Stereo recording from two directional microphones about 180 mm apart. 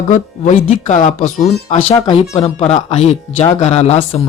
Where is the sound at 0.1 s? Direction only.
40° left (ahead or behind).